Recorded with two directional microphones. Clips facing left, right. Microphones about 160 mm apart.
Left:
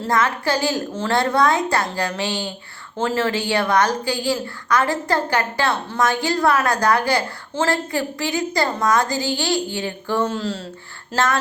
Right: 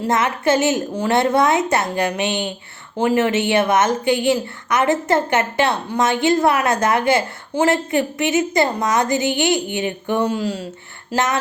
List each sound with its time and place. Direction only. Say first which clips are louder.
0.0 s a woman's voice: right 2 dB; 20° right (ahead or behind)